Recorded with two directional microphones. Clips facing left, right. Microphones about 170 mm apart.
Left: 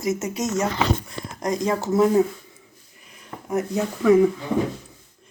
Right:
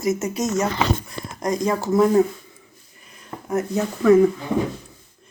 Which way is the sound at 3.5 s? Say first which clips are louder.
Right 1 dB; 15° left (ahead or behind).